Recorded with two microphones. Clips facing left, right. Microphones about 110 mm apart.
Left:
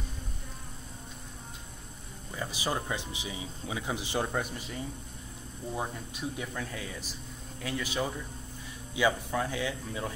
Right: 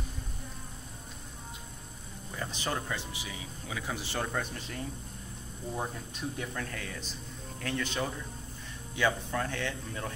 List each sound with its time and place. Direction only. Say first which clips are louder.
2.3 s speech: left 2 dB; 10° left (ahead or behind)